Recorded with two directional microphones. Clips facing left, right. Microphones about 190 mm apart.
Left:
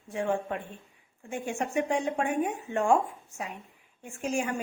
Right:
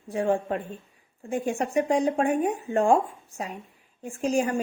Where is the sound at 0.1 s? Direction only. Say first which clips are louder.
Right 5 dB; 35° right (ahead or behind).